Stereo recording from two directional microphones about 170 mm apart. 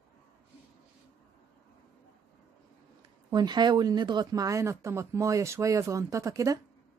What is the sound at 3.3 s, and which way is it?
Speech, 25° right (ahead or behind).